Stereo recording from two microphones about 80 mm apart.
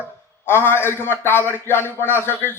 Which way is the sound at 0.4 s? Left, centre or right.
Left.